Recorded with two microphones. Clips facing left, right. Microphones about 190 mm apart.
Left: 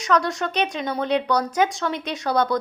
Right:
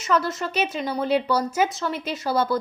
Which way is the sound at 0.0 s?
5° right (ahead or behind).